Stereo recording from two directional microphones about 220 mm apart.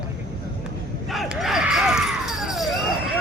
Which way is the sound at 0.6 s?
Centre (ahead or behind).